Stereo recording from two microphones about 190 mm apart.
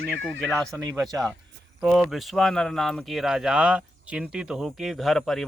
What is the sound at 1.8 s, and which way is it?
Speech, 5° right (ahead or behind).